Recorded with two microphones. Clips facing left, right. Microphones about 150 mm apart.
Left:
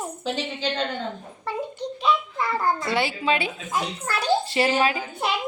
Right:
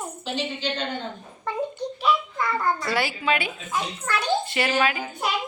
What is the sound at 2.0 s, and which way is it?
A child's voice, 25° left (ahead or behind).